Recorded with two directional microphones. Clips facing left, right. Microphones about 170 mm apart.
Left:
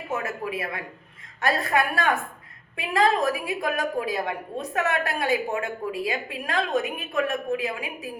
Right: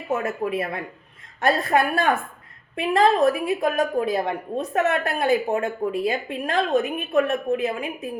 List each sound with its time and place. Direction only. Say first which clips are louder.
0.1 s a woman's voice: right 5 dB; 30° right (ahead or behind)